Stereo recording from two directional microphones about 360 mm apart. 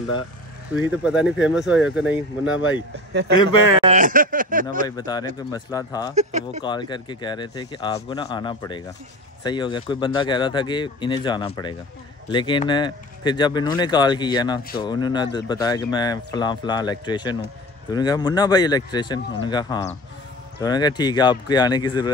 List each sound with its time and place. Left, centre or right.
0.8 s speech: centre
3.1 s speech: right
4.8 s speech: centre
6.1 s speech: centre
6.6 s speech: centre